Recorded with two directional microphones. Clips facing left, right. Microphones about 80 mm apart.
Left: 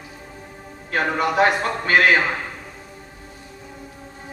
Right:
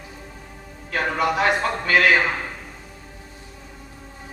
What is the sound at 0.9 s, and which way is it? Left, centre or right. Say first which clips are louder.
Music: left 1 dB; left.